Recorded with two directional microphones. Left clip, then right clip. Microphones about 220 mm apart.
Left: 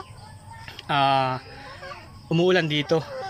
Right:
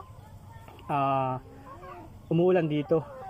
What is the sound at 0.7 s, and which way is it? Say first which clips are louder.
A man's voice: left 6 dB; 5° right (ahead or behind).